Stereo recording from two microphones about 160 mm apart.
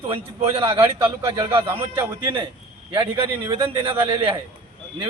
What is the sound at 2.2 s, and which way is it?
A man's voice, 30° right (ahead or behind).